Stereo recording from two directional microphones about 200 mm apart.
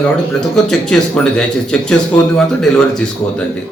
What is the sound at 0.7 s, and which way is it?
Speech, centre (ahead or behind).